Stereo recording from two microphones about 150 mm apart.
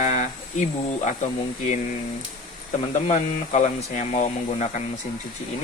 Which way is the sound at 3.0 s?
50° left (ahead or behind).